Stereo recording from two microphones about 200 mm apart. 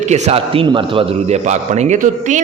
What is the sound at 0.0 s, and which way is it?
A man's voice, 30° right (ahead or behind).